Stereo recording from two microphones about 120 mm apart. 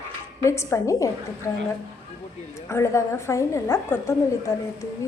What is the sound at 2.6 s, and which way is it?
A woman's voice, 25° left (ahead or behind).